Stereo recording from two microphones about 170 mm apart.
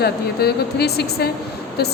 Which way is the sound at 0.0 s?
70° left (ahead or behind).